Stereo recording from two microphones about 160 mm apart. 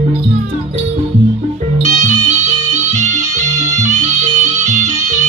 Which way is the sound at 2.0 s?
50° right (ahead or behind).